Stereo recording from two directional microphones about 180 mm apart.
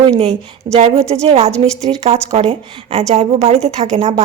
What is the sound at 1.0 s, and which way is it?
A woman's voice, 35° right (ahead or behind).